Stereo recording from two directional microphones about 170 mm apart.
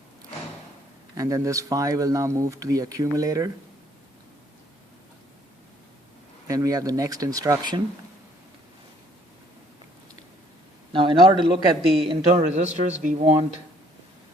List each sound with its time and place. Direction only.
1.1 s speech: 20° right (ahead or behind)
6.5 s speech: 20° right (ahead or behind)
10.9 s a man's voice: 30° right (ahead or behind)
12.3 s a man's voice: 45° right (ahead or behind)